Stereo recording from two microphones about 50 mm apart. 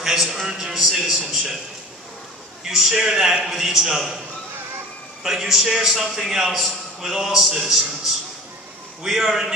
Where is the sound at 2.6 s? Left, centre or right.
Centre.